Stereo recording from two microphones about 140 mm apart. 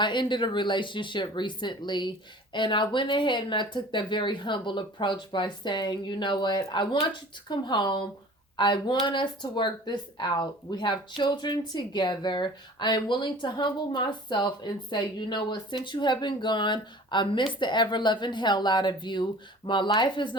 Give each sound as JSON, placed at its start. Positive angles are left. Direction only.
{"t": 0.0, "sound": "speech", "side_deg": 35}